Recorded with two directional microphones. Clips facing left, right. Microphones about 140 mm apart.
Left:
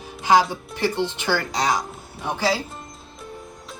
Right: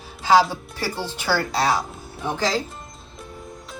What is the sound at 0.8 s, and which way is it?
Speech, 20° left (ahead or behind).